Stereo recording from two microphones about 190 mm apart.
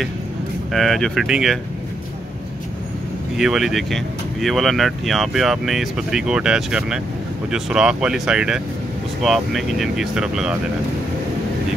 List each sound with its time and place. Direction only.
0.7 s speech: centre (ahead or behind)
3.3 s speech: centre (ahead or behind)